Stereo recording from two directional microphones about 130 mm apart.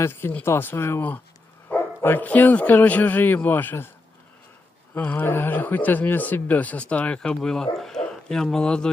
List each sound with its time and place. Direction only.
0.0 s speech: 20° left (ahead or behind)
4.9 s speech: 15° left (ahead or behind)